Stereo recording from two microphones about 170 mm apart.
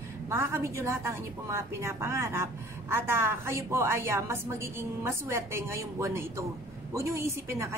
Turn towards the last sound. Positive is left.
turn(degrees=-15)  # may be behind; listen again after turning